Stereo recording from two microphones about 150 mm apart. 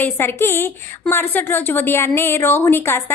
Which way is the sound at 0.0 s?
15° left (ahead or behind).